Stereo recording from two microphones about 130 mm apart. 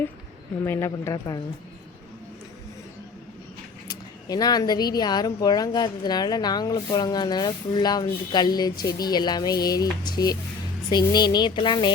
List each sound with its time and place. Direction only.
0.6 s speech: 20° left (ahead or behind)
3.8 s speech: 30° left (ahead or behind)